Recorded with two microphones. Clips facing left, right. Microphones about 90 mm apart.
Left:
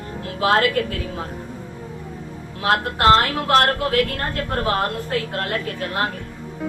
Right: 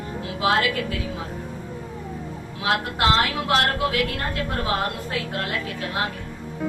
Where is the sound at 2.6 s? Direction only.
45° left (ahead or behind).